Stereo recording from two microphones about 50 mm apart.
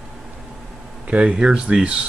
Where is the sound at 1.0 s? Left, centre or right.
Right.